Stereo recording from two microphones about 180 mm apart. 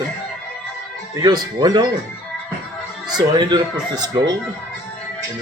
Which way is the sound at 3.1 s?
25° right (ahead or behind).